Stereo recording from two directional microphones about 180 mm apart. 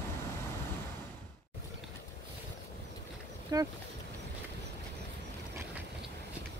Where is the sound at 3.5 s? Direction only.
20° right (ahead or behind).